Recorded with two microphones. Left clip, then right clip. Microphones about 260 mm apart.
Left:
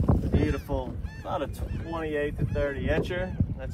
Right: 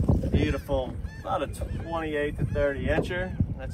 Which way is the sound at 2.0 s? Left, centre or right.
Right.